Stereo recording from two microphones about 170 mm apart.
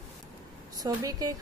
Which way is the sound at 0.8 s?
20° right (ahead or behind).